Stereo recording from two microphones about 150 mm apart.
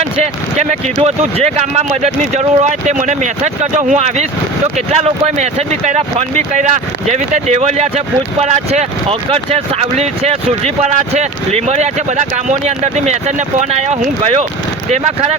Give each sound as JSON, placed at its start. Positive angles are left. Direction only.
{"t": 0.0, "sound": "speech", "side_deg": -50}